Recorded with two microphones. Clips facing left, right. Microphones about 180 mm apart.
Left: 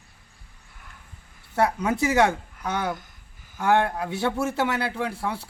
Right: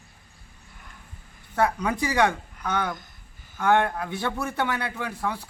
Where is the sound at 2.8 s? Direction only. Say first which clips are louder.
Left 3 dB; 10° left (ahead or behind).